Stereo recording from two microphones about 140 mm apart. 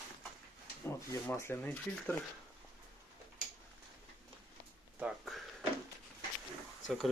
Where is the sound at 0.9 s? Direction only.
20° left (ahead or behind).